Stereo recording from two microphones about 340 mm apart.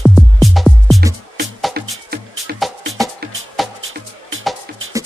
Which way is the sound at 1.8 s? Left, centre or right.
Right.